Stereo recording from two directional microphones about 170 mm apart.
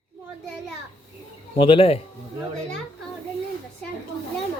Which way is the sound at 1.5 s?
30° left (ahead or behind).